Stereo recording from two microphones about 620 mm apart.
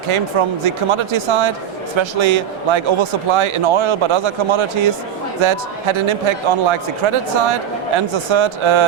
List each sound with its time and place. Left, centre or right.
0.1 s speech: right